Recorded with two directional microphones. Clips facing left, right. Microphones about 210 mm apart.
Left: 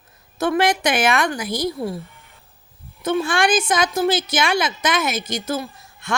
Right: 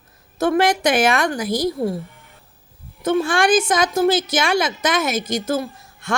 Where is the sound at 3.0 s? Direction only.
45° right (ahead or behind).